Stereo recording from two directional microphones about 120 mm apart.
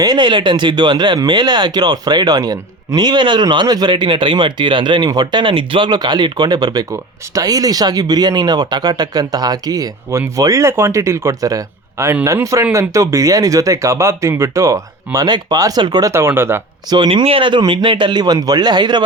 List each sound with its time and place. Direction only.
0.0 s speech: 40° right (ahead or behind); by 16.6 s 20° right (ahead or behind)
16.9 s speech: 40° right (ahead or behind)